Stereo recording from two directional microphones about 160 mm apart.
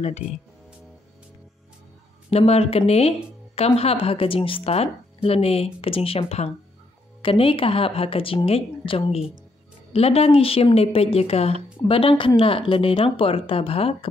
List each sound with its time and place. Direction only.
2.3 s speech: 40° left (ahead or behind)